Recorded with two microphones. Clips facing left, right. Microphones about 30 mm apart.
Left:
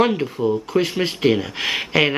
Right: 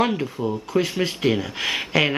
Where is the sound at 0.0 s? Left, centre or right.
Centre.